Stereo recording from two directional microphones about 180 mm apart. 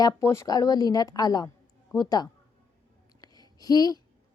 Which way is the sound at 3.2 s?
20° left (ahead or behind).